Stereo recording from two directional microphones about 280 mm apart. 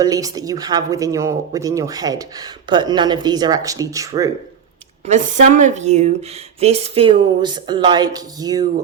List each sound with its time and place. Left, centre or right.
0.0 s speech: centre
5.0 s speech: right